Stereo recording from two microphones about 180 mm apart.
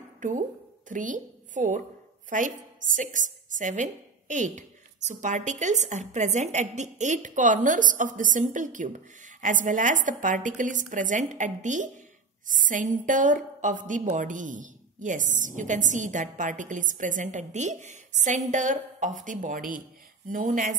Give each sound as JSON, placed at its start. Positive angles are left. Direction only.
{"t": 0.2, "sound": "a woman's voice", "side_deg": -45}